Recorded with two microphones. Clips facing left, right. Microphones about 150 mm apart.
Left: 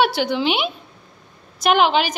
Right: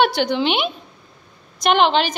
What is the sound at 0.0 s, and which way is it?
A woman's voice, 5° left (ahead or behind).